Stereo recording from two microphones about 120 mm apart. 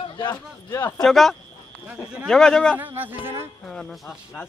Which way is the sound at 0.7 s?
25° left (ahead or behind).